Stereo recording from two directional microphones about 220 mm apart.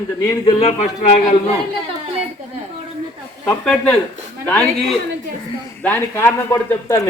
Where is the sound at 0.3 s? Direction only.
25° left (ahead or behind).